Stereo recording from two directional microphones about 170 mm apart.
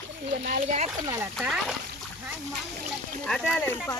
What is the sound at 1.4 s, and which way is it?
Speech, 5° right (ahead or behind).